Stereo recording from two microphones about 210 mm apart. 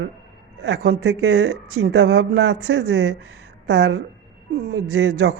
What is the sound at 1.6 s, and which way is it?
Speech, 90° right.